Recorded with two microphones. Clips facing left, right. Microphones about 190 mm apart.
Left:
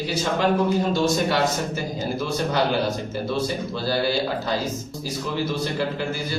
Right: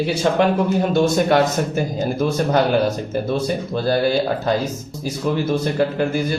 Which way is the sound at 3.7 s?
50° right (ahead or behind).